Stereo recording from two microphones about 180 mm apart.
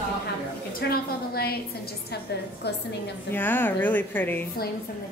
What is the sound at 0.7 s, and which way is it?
A woman's voice, 60° left (ahead or behind).